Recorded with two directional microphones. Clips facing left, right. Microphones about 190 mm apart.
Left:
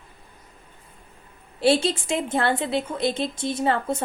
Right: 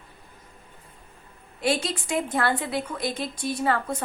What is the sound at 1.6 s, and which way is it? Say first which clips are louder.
A woman's voice: left 6 dB; 30° left (ahead or behind).